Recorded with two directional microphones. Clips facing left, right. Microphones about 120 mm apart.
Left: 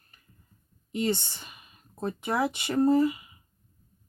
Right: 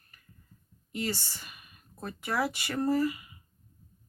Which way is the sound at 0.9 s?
20° left (ahead or behind).